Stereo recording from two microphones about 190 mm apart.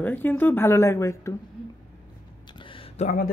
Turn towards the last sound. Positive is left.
turn(degrees=30)  # may be behind; listen again after turning